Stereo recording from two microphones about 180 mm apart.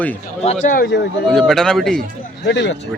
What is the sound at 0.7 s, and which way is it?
Speech, 55° left (ahead or behind).